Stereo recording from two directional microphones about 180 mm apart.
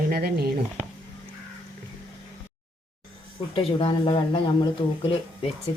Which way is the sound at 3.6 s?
30° left (ahead or behind).